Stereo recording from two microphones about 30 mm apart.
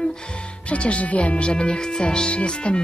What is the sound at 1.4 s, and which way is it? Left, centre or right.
Speech, left.